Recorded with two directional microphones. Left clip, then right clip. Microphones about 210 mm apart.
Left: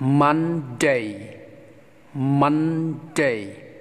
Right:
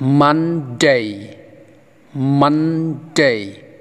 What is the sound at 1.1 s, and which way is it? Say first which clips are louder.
Speech: right 4 dB; 15° right (ahead or behind).